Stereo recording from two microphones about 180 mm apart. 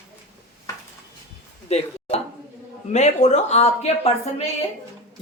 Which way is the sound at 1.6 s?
35° left (ahead or behind).